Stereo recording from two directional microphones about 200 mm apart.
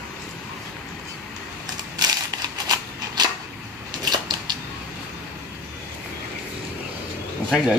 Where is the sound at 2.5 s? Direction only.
20° right (ahead or behind).